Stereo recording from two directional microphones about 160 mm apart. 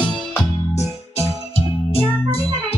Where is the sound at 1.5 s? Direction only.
40° left (ahead or behind).